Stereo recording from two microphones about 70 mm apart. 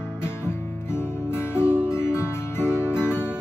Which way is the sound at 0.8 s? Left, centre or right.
Left.